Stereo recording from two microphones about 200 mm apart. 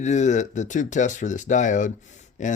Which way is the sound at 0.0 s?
35° left (ahead or behind).